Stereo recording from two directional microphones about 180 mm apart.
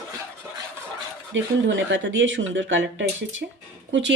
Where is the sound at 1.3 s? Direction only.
90° right.